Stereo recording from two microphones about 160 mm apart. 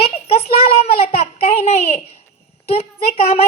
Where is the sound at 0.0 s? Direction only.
40° left (ahead or behind).